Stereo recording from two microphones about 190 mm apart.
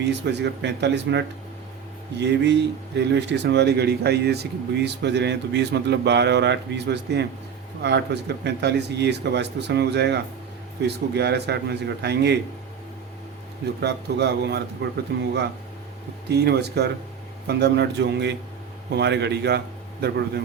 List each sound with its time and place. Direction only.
0.0 s speech: 65° right (ahead or behind)
13.8 s speech: 60° right (ahead or behind)
16.3 s speech: 60° right (ahead or behind)